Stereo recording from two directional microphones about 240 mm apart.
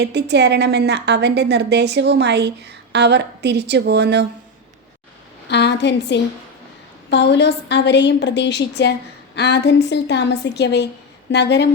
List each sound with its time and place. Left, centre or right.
0.0 s a woman's voice: right
5.5 s a woman's voice: left